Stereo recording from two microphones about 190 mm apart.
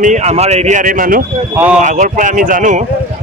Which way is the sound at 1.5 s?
10° right (ahead or behind).